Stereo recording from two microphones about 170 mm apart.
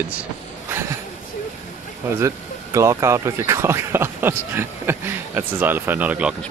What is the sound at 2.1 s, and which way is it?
Speech, 15° right (ahead or behind).